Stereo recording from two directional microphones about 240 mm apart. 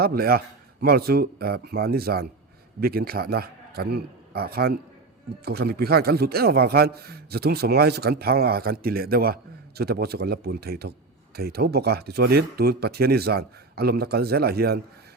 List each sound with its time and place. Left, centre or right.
0.0 s a man's voice: right